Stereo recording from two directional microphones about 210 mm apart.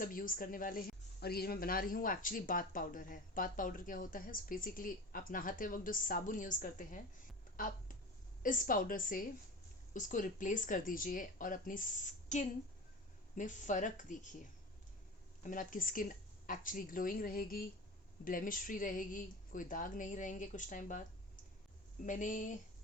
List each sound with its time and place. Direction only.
0.0 s a woman's voice: 40° left (ahead or behind)
7.5 s a sound: 40° left (ahead or behind)
8.4 s a woman's voice: 40° left (ahead or behind)
15.4 s a woman's voice: 40° left (ahead or behind)
22.0 s a woman's voice: 35° left (ahead or behind)